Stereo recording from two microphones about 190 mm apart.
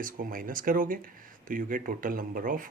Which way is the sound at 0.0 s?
45° right (ahead or behind).